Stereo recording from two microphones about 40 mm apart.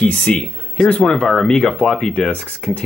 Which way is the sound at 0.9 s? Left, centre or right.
Centre.